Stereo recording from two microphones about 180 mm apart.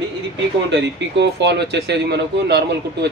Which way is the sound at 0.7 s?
75° right (ahead or behind).